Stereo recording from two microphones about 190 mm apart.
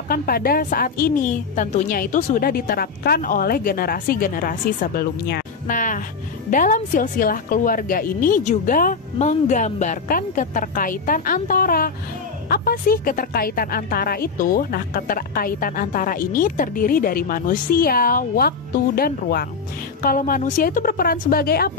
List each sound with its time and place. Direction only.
0.1 s a woman's voice: 50° left (ahead or behind)